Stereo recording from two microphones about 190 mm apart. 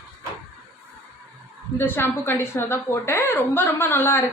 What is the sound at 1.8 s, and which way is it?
A woman's voice, 10° left (ahead or behind).